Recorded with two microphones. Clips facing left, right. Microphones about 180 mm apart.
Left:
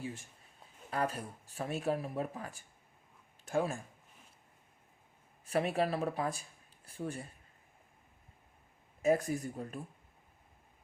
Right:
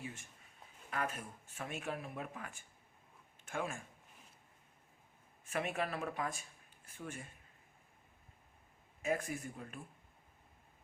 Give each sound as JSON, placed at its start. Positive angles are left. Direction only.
{"t": 0.0, "sound": "a sound", "side_deg": 35}
{"t": 0.9, "sound": "speech", "side_deg": 35}
{"t": 5.5, "sound": "speech", "side_deg": 35}
{"t": 9.0, "sound": "speech", "side_deg": 35}